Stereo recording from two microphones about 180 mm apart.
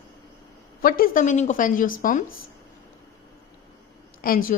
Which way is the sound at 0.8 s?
50° left (ahead or behind).